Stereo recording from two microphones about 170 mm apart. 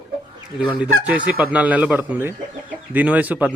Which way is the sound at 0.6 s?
10° right (ahead or behind).